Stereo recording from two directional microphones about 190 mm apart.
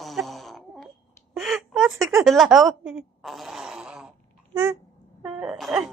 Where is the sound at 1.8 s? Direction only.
15° right (ahead or behind).